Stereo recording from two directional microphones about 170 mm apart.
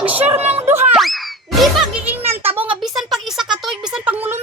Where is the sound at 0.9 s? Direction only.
Centre (ahead or behind).